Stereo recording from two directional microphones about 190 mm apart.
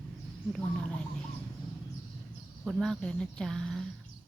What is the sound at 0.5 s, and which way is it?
Speech, 5° left (ahead or behind).